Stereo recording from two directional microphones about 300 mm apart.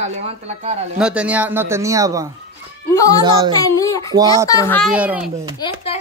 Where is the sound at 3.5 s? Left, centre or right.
Centre.